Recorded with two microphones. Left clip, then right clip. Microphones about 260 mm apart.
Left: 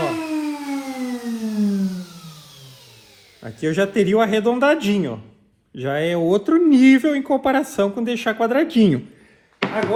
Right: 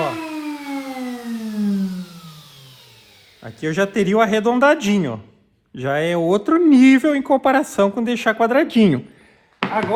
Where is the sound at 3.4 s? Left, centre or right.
Right.